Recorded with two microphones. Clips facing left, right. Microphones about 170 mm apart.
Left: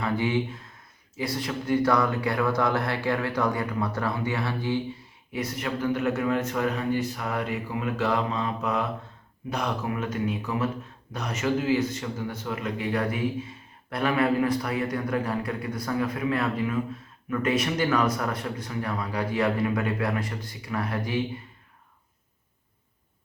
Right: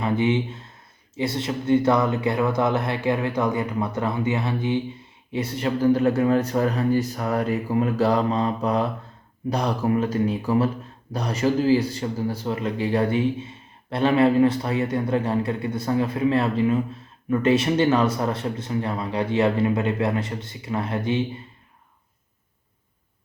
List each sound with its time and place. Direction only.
0.0 s a man's voice: 20° right (ahead or behind)